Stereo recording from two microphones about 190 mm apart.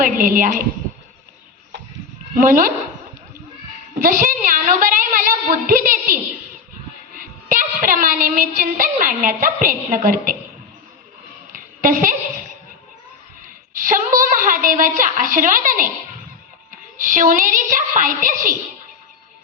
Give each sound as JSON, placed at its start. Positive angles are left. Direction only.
{"t": 0.0, "sound": "a woman's voice", "side_deg": -45}
{"t": 2.3, "sound": "a woman's voice", "side_deg": -45}
{"t": 4.0, "sound": "a woman's voice", "side_deg": -45}
{"t": 7.2, "sound": "a woman's voice", "side_deg": -45}
{"t": 11.5, "sound": "a sound", "side_deg": -45}
{"t": 13.7, "sound": "a woman's voice", "side_deg": -45}
{"t": 17.0, "sound": "a woman's voice", "side_deg": -45}